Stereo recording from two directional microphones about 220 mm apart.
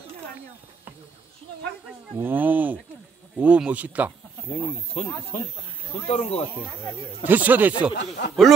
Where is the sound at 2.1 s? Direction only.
10° right (ahead or behind).